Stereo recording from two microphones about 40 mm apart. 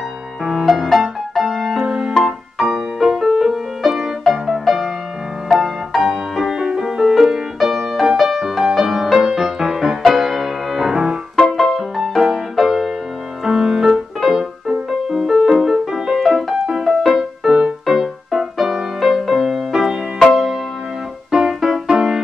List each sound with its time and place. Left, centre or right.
0.5 s music: centre
1.4 s keyboard: centre
1.9 s music: centre
2.1 s music: centre
6.6 s music: centre
11.5 s music: centre
21.3 s music: centre